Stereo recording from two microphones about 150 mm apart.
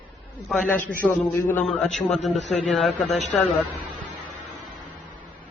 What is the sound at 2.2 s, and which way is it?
Speech, 50° left (ahead or behind).